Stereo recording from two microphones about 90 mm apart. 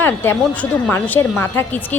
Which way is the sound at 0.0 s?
25° left (ahead or behind).